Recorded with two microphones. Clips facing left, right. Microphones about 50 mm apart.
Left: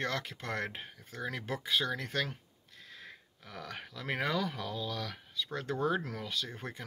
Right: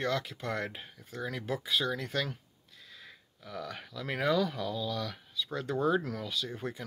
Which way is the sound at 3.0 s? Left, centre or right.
Left.